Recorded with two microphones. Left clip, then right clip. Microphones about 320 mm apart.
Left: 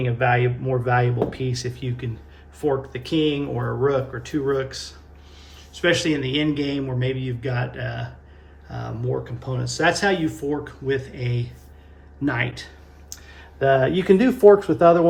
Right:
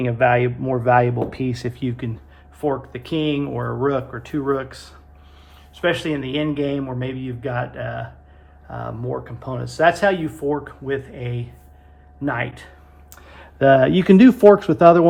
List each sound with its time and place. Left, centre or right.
0.0 s speech: right; by 12.6 s centre
13.2 s speech: centre
14.5 s speech: centre